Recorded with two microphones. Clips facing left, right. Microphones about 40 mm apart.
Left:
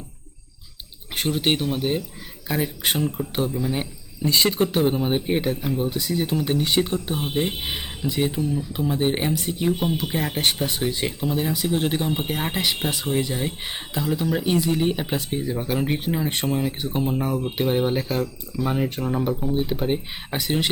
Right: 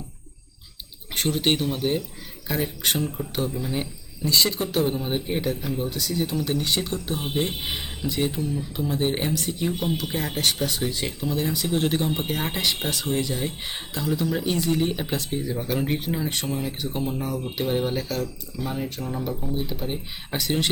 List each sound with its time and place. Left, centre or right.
1.1 s speech: centre; by 20.0 s left
20.3 s speech: centre